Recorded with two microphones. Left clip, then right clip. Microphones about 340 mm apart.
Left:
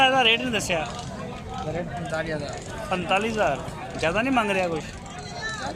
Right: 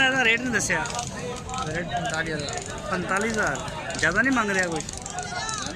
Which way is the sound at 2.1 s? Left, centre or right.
Centre.